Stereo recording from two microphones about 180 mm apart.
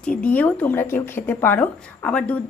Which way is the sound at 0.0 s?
5° left (ahead or behind).